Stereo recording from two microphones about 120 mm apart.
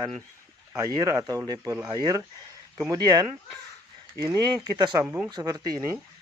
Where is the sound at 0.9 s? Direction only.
35° right (ahead or behind).